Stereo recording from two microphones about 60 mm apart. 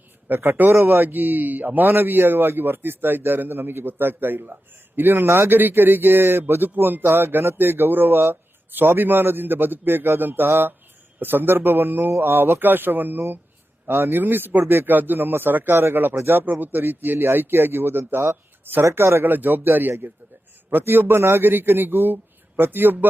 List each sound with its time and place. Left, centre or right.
0.3 s a man's voice: right
0.7 s a man's voice: right
5.5 s a man's voice: right